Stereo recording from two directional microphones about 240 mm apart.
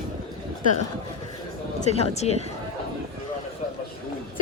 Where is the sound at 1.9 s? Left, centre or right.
Left.